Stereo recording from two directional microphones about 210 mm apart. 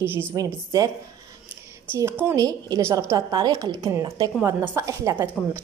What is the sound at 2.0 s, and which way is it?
A woman's voice, 10° right (ahead or behind).